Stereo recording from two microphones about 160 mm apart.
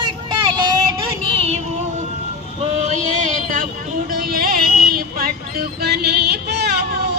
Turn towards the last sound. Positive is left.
turn(degrees=-90)